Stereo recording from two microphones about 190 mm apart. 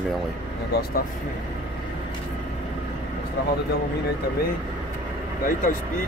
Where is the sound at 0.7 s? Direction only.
60° left (ahead or behind).